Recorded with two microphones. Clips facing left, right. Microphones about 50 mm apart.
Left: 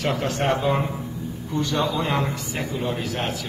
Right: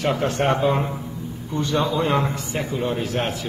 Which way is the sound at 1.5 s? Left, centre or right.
Centre.